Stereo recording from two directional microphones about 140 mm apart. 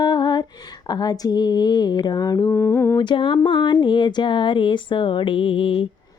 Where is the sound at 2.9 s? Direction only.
35° left (ahead or behind).